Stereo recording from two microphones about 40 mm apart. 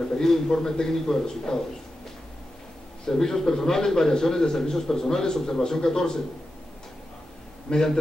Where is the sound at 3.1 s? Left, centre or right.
Centre.